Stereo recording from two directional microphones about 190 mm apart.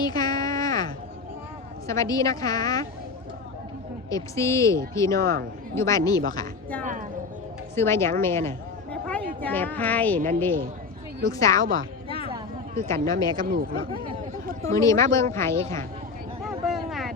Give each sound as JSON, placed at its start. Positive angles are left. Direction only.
{"t": 0.0, "sound": "a sound", "side_deg": 20}
{"t": 1.9, "sound": "a woman's voice", "side_deg": 15}
{"t": 4.1, "sound": "speech", "side_deg": 15}
{"t": 5.2, "sound": "speech", "side_deg": -50}
{"t": 5.7, "sound": "speech", "side_deg": 15}
{"t": 7.8, "sound": "speech", "side_deg": 15}
{"t": 11.6, "sound": "speech", "side_deg": -45}
{"t": 12.0, "sound": "a sound", "side_deg": 30}
{"t": 12.9, "sound": "a woman's voice", "side_deg": 20}
{"t": 13.5, "sound": "speech", "side_deg": -50}
{"t": 14.8, "sound": "speech", "side_deg": 15}
{"t": 16.6, "sound": "a sound", "side_deg": 0}